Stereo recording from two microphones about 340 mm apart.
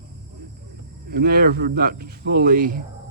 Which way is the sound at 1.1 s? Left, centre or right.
Right.